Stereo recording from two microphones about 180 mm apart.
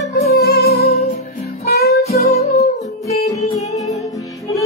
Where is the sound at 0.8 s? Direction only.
35° left (ahead or behind).